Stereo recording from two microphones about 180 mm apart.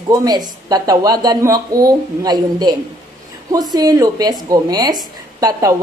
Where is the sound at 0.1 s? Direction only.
20° right (ahead or behind).